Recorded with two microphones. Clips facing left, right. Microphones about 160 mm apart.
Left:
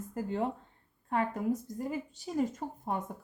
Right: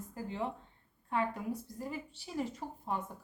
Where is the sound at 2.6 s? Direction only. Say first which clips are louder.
Left 4 dB; 50° left (ahead or behind).